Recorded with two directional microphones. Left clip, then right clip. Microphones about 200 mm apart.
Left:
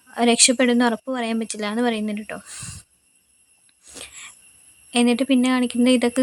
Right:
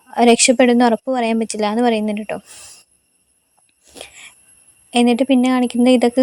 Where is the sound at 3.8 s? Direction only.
10° right (ahead or behind).